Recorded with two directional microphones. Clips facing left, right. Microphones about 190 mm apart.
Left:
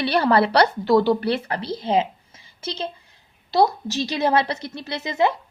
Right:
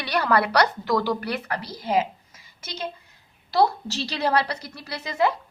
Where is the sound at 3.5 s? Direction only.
20° left (ahead or behind).